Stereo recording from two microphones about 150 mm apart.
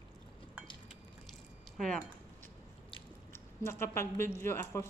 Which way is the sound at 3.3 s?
15° left (ahead or behind).